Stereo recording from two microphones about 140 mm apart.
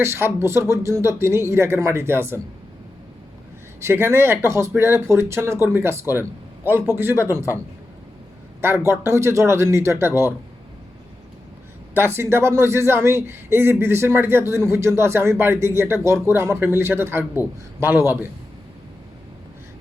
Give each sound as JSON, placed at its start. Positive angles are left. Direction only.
{"t": 0.0, "sound": "speech", "side_deg": -15}
{"t": 3.8, "sound": "a man's voice", "side_deg": -20}
{"t": 8.6, "sound": "a man's voice", "side_deg": -15}
{"t": 11.9, "sound": "a man's voice", "side_deg": -15}